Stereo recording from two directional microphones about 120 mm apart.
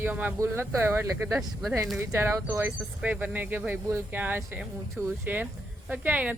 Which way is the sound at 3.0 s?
10° right (ahead or behind).